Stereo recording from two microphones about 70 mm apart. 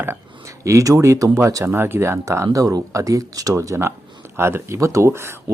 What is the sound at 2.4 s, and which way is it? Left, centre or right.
Speech, right.